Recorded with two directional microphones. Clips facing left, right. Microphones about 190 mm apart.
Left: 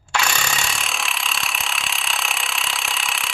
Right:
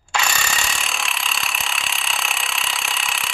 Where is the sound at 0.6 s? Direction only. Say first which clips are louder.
Even; centre (ahead or behind).